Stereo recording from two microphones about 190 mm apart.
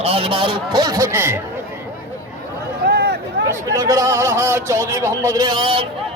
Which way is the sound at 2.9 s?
60° right (ahead or behind).